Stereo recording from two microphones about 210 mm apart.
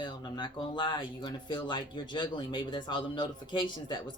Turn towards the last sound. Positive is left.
turn(degrees=20)  # may be behind; listen again after turning